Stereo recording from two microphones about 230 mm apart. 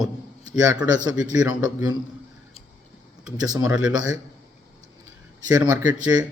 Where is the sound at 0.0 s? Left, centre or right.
Centre.